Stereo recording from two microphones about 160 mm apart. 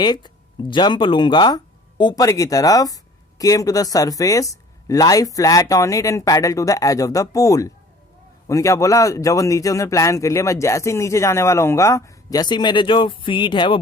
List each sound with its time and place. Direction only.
0.0 s speech: 25° left (ahead or behind)